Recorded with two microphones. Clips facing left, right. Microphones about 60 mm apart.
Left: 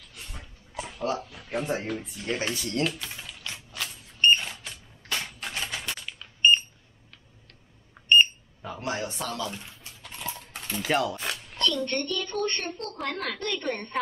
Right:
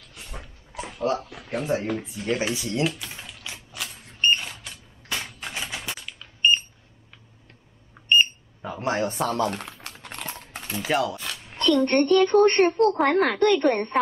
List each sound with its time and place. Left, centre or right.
0.2 s dog: centre
0.9 s speech: centre
1.9 s speech: centre
2.9 s typing: centre
3.4 s mechanisms: centre
4.2 s a sound: centre
8.1 s smoke detector: centre
8.8 s a woman's voice: right
9.5 s typing: right
10.5 s speech: centre
11.3 s a sound: right
11.7 s a woman's voice: right